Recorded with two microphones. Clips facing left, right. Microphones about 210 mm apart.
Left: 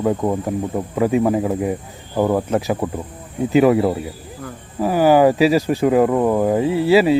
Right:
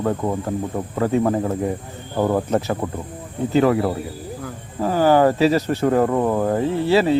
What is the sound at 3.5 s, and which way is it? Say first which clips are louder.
Speech: left 3 dB; 15° left (ahead or behind).